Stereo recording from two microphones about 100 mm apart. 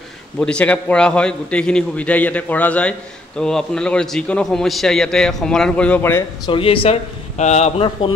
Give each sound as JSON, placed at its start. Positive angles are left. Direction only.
{"t": 0.4, "sound": "a man's voice", "side_deg": 10}
{"t": 6.5, "sound": "speech", "side_deg": 65}
{"t": 7.4, "sound": "a man's voice", "side_deg": 90}